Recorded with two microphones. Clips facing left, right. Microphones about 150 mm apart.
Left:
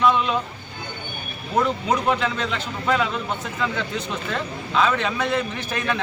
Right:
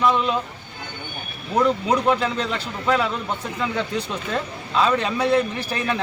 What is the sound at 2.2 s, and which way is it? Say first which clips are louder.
Speech: right 1 dB; 35° right (ahead or behind).